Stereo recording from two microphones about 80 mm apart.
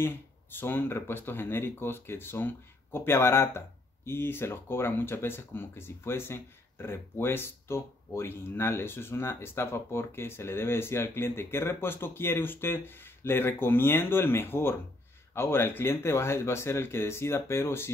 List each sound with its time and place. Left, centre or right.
0.0 s speech: left